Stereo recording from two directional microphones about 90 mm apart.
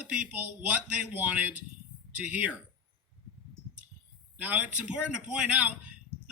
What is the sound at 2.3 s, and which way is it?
Speech, 15° right (ahead or behind).